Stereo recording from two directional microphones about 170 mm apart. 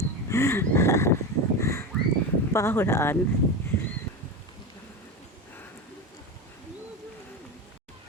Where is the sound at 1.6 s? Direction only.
15° left (ahead or behind).